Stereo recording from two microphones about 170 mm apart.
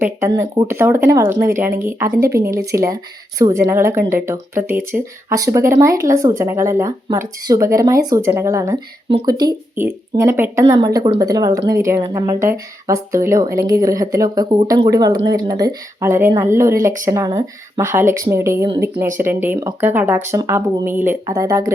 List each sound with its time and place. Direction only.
0.0 s a woman's voice: 15° right (ahead or behind)
9.0 s a woman's voice: 30° right (ahead or behind)
9.7 s a woman's voice: 15° right (ahead or behind)